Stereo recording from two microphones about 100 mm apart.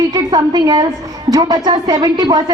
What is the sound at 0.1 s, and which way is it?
A woman's voice, 40° right (ahead or behind).